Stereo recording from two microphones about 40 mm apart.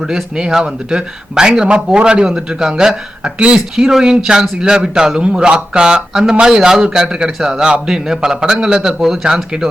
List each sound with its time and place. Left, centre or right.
0.3 s a man's voice: centre